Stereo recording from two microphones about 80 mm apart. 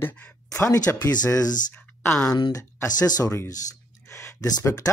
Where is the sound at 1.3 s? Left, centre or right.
Left.